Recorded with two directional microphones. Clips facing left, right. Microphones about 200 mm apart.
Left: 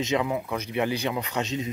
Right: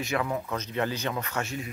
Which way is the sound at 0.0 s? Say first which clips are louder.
Left 4 dB; 20° left (ahead or behind).